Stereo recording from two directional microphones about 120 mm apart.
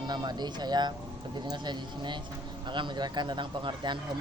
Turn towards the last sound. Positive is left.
turn(degrees=-40)  # may be behind; listen again after turning